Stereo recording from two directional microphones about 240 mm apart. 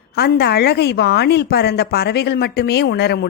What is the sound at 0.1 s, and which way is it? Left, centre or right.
A woman's voice, left.